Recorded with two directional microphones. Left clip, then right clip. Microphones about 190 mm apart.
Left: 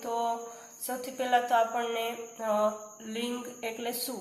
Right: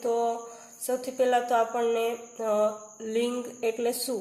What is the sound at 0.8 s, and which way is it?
A woman's voice, 50° right (ahead or behind).